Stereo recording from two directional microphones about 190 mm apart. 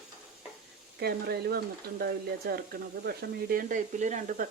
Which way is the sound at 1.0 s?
55° right (ahead or behind).